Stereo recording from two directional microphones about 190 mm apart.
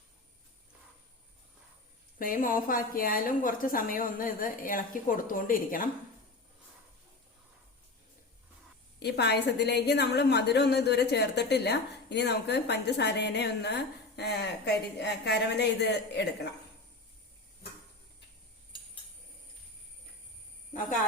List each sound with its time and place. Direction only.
2.1 s a woman's voice: 45° left (ahead or behind)
9.0 s a woman's voice: 60° left (ahead or behind)